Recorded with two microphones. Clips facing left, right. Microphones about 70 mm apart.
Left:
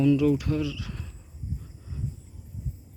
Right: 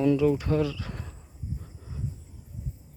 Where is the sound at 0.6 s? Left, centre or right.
Right.